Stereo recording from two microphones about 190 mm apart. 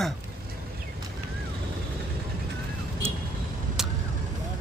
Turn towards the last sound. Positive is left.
turn(degrees=0)  # may be behind; listen again after turning